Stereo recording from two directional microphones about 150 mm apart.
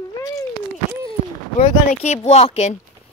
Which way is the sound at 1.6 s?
50° left (ahead or behind).